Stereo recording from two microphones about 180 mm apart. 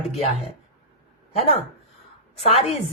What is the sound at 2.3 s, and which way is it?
Speech, 35° left (ahead or behind).